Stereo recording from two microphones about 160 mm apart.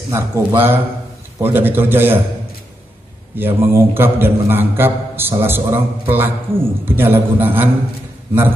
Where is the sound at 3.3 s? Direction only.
15° right (ahead or behind).